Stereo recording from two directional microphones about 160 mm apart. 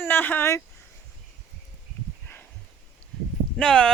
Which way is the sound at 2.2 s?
15° left (ahead or behind).